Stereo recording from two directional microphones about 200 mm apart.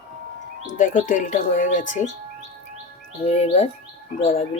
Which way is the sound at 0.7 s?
40° left (ahead or behind).